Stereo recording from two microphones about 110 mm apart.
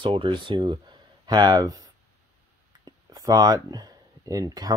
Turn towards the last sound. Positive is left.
turn(degrees=-35)  # may be behind; listen again after turning